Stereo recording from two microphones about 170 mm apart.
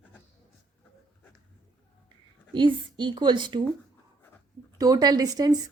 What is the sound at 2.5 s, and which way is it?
A woman's voice, 30° right (ahead or behind).